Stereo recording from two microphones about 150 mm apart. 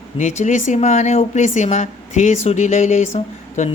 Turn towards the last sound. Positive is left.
turn(degrees=50)  # may be behind; listen again after turning